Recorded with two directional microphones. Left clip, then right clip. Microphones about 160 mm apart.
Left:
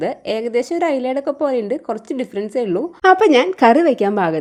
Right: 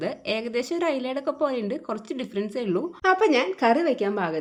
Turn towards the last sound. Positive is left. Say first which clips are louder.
# left 9 dB
turn(degrees=60)  # may be behind; listen again after turning